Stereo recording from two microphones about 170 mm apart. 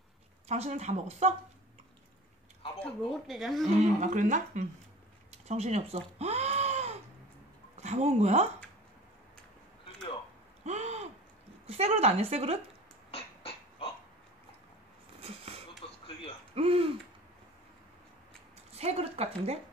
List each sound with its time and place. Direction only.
0.5 s speech: 40° right (ahead or behind)
2.8 s speech: centre (ahead or behind)
4.0 s speech: 45° right (ahead or behind)
5.5 s a sound: 40° right (ahead or behind)
7.7 s speech: 40° right (ahead or behind)
10.6 s a sound: 40° right (ahead or behind)
11.6 s a woman's voice: 35° right (ahead or behind)
13.1 s a sound: 35° left (ahead or behind)
15.1 s a sound: 35° right (ahead or behind)
15.8 s television: 35° left (ahead or behind)
16.5 s speech: 35° right (ahead or behind)
18.7 s speech: 35° right (ahead or behind)